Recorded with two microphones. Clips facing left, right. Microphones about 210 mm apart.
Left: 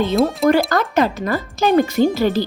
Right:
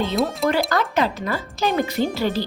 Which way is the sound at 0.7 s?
45° left (ahead or behind).